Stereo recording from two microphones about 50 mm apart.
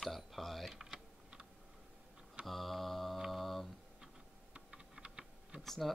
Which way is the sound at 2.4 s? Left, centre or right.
Centre.